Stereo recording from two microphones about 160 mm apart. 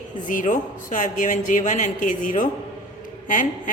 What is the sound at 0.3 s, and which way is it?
A woman's voice, 55° left (ahead or behind).